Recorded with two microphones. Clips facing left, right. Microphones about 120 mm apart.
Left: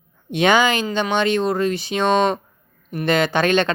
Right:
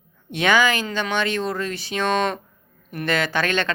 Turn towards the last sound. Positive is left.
turn(degrees=20)  # may be behind; listen again after turning